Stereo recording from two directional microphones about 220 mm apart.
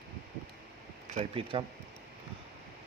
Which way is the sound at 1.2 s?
25° right (ahead or behind).